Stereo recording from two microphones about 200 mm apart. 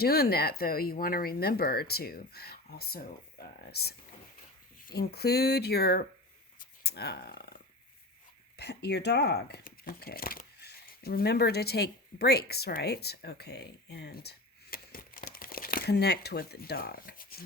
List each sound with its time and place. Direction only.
0.0 s speech: 50° left (ahead or behind)
6.6 s a sound: 55° left (ahead or behind)
8.5 s speech: 55° left (ahead or behind)